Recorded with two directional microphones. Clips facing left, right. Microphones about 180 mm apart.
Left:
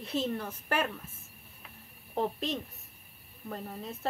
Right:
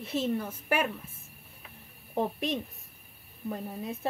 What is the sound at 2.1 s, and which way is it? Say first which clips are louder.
Speech: right 2 dB; 15° right (ahead or behind).